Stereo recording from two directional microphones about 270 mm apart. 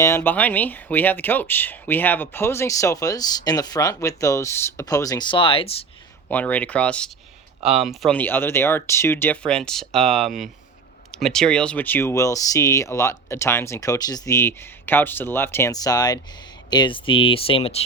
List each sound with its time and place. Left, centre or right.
0.0 s speech: centre
6.2 s speech: centre; by 17.7 s left